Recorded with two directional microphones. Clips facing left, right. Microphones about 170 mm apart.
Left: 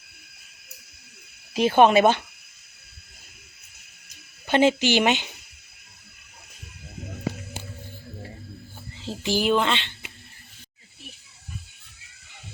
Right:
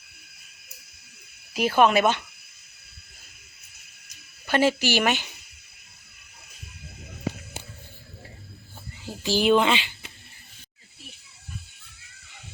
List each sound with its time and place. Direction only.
1.5 s a woman's voice: 25° left (ahead or behind)
4.4 s a woman's voice: 20° left (ahead or behind)
9.0 s a sound: 25° left (ahead or behind)
9.5 s speech: 5° right (ahead or behind)